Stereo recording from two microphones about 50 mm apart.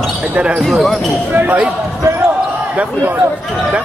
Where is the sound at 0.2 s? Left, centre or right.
Right.